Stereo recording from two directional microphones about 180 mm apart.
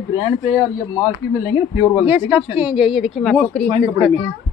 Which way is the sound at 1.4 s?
10° right (ahead or behind).